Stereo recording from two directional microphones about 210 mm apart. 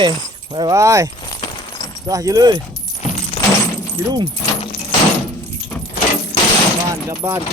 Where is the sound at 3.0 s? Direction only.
35° left (ahead or behind).